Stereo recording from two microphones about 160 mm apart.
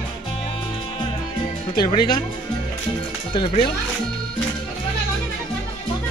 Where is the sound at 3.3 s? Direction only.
30° left (ahead or behind).